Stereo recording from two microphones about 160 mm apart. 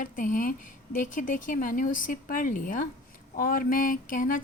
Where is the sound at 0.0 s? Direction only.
55° left (ahead or behind).